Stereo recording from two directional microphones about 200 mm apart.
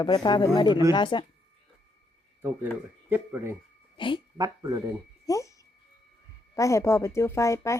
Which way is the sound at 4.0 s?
25° left (ahead or behind).